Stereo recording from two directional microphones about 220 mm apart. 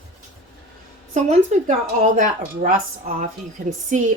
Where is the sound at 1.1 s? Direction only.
30° right (ahead or behind).